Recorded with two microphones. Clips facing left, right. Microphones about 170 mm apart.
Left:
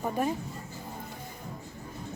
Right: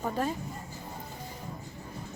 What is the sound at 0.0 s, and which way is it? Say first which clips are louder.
Speech: left 2 dB; 15° left (ahead or behind).